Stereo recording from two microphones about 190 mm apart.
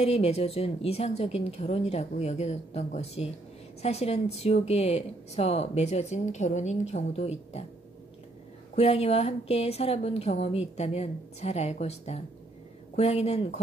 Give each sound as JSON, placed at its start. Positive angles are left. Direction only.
{"t": 0.0, "sound": "speech", "side_deg": 35}
{"t": 8.7, "sound": "speech", "side_deg": 30}